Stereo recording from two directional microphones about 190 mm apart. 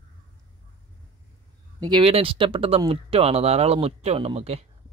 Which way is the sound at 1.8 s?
25° right (ahead or behind).